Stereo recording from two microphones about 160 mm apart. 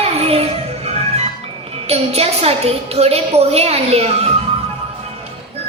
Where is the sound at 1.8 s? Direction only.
40° right (ahead or behind).